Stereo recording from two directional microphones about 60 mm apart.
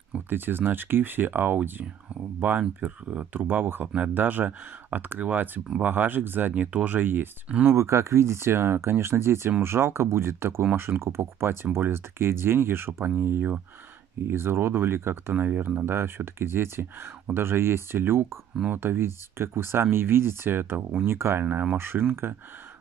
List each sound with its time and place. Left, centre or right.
0.3 s speech: right
6.5 s speech: right
7.7 s speech: right
15.3 s speech: right